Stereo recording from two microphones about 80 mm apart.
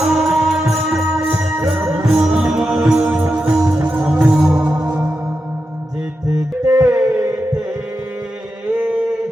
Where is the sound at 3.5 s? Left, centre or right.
Right.